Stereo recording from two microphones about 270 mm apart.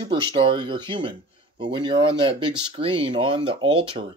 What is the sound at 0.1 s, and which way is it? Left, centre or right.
Speech, centre.